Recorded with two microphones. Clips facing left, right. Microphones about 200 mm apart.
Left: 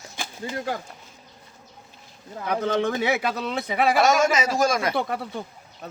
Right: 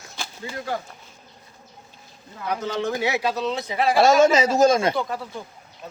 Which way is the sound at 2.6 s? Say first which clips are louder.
Left 3 dB; 55° left (ahead or behind).